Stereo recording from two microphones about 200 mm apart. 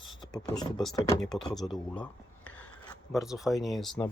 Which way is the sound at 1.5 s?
Centre (ahead or behind).